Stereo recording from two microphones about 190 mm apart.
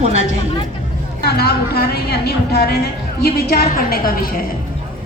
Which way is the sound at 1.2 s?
55° left (ahead or behind).